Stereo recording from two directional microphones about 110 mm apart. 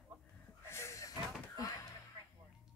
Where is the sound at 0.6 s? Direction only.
25° left (ahead or behind).